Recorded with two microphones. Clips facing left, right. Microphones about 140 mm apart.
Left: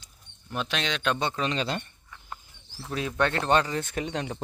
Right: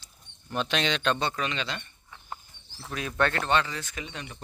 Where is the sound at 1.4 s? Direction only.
35° left (ahead or behind).